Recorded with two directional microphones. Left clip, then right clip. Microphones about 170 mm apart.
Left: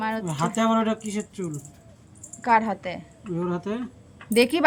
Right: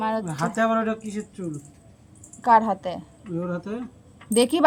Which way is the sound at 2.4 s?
10° right (ahead or behind).